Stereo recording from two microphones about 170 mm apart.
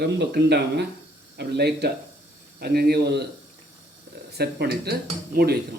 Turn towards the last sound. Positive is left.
turn(degrees=-65)  # may be behind; listen again after turning